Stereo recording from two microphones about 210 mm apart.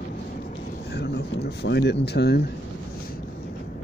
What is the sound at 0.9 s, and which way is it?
Speech, 50° left (ahead or behind).